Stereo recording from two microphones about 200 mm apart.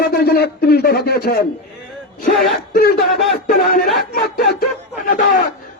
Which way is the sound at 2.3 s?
Centre (ahead or behind).